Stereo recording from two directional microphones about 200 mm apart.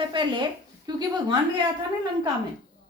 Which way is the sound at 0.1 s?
25° right (ahead or behind).